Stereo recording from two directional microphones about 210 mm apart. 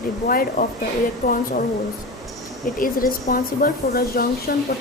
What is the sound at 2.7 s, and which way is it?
Speech, 40° left (ahead or behind).